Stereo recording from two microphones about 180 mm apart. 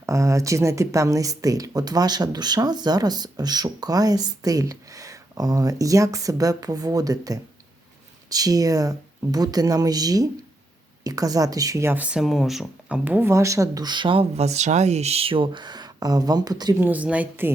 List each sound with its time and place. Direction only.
0.0 s speech: 15° right (ahead or behind)
16.8 s speech: 10° right (ahead or behind)